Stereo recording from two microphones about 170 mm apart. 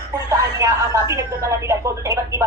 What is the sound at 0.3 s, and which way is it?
Speech, 15° right (ahead or behind).